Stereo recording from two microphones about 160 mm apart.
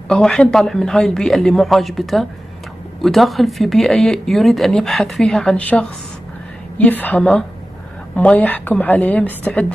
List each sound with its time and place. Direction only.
0.1 s a woman's voice: 5° left (ahead or behind)